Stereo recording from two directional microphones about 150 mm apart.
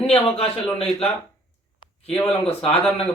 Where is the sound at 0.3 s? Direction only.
40° left (ahead or behind).